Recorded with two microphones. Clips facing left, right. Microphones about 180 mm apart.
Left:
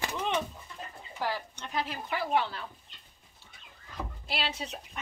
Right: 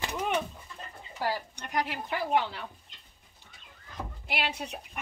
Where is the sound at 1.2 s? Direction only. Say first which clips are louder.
Right 2 dB; 15° right (ahead or behind).